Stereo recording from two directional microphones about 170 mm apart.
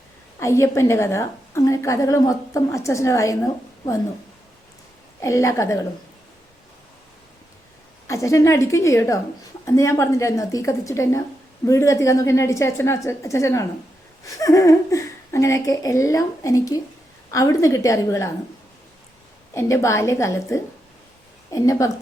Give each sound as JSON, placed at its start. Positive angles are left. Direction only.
{"t": 0.3, "sound": "a woman's voice", "side_deg": 15}
{"t": 5.2, "sound": "a woman's voice", "side_deg": 20}
{"t": 8.0, "sound": "a woman's voice", "side_deg": 20}
{"t": 19.5, "sound": "a woman's voice", "side_deg": 15}